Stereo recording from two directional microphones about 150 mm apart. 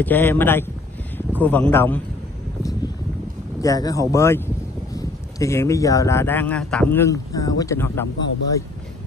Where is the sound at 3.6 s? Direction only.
25° left (ahead or behind).